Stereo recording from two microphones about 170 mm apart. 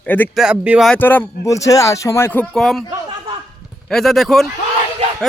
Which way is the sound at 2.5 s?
Centre (ahead or behind).